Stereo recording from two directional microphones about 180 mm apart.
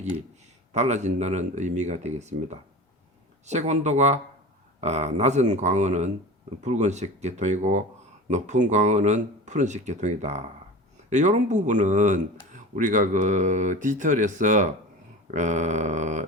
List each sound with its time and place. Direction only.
0.7 s speech: 40° right (ahead or behind)